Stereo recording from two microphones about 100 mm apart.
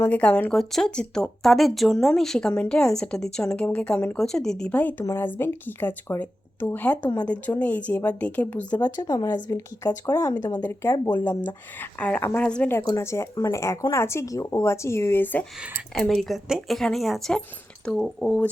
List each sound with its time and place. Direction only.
0.0 s speech: 15° left (ahead or behind)
0.5 s speech: centre (ahead or behind)
8.8 s speech: 40° left (ahead or behind)
10.6 s speech: 25° left (ahead or behind)
12.8 s speech: 35° left (ahead or behind)
16.0 s speech: centre (ahead or behind)